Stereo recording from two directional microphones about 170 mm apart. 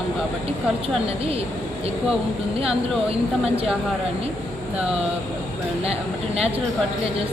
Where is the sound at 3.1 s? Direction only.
35° right (ahead or behind).